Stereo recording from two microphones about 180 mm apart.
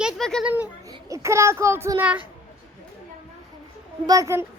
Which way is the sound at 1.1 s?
15° right (ahead or behind).